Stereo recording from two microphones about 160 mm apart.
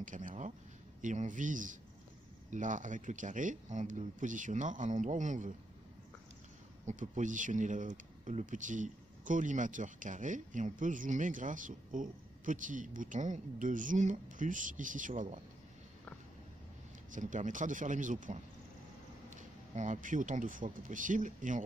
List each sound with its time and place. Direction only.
0.0 s speech: 55° right (ahead or behind)
6.9 s speech: 50° right (ahead or behind)
17.1 s speech: 50° right (ahead or behind)